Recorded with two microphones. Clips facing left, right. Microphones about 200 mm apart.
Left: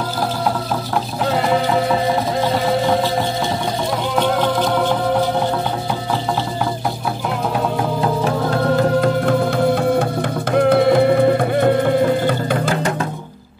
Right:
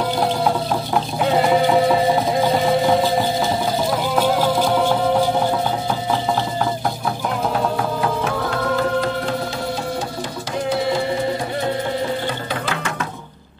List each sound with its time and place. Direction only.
1.3 s a sound: centre (ahead or behind)
4.1 s music: 5° right (ahead or behind)
8.7 s music: 55° left (ahead or behind)
10.5 s music: 60° left (ahead or behind)